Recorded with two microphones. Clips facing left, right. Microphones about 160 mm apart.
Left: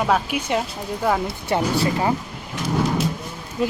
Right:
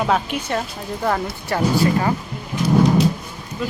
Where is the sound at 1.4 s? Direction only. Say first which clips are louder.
Right 4 dB; 20° left (ahead or behind).